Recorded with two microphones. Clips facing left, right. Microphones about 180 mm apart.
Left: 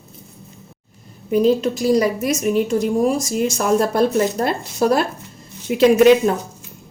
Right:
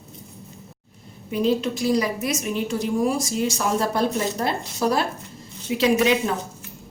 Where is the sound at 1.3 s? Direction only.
45° left (ahead or behind).